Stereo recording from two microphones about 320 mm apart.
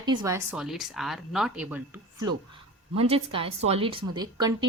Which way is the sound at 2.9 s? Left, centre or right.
Centre.